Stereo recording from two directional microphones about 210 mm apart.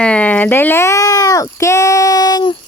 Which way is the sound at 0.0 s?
5° left (ahead or behind).